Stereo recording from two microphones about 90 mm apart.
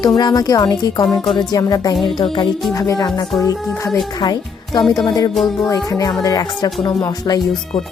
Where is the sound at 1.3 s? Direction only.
45° left (ahead or behind).